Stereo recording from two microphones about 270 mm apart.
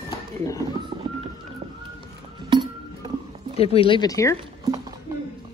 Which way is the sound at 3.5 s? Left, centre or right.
Left.